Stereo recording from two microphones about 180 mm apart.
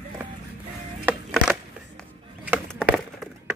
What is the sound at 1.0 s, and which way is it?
Music, 5° right (ahead or behind).